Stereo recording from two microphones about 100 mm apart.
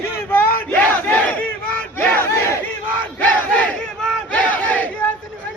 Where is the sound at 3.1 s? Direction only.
15° left (ahead or behind).